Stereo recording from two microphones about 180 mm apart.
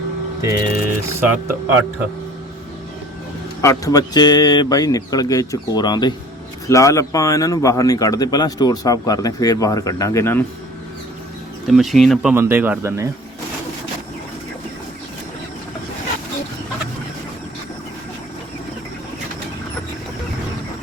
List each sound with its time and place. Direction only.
1.2 s a man's voice: 10° right (ahead or behind)
3.6 s speech: 15° left (ahead or behind)
11.7 s speech: centre (ahead or behind)
12.3 s a man's voice: 10° right (ahead or behind)